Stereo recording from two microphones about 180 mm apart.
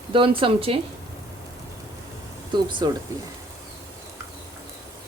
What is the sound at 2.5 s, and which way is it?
Speech, 25° right (ahead or behind).